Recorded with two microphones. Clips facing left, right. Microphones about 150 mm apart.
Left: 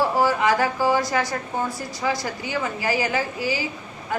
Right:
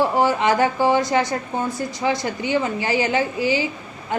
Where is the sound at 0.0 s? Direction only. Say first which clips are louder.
Right 2 dB; 20° right (ahead or behind).